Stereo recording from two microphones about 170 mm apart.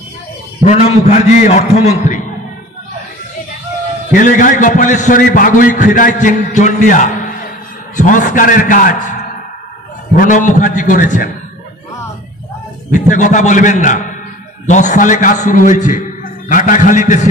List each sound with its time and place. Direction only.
0.7 s a man's voice: 40° left (ahead or behind)
4.1 s a man's voice: 50° left (ahead or behind)
12.9 s a man's voice: 45° left (ahead or behind)